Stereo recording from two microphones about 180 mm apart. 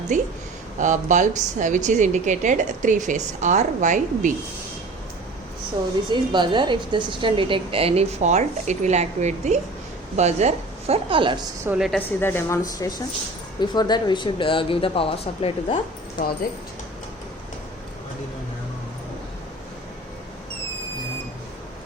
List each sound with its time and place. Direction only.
0.1 s a woman's voice: 45° right (ahead or behind)
6.1 s a woman's voice: 25° right (ahead or behind)
11.6 s a woman's voice: 5° right (ahead or behind)
11.9 s a woman's voice: 10° left (ahead or behind); by 15.8 s 30° left (ahead or behind)